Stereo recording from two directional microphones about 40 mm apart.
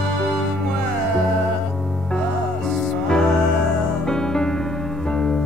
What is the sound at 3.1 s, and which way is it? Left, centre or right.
Music, centre.